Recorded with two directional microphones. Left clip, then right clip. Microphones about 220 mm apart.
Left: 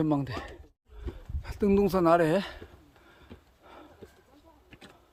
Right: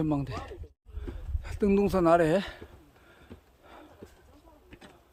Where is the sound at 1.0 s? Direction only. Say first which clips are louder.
Even; centre (ahead or behind).